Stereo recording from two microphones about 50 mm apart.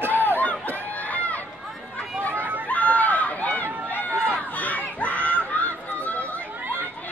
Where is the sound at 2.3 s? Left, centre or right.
Right.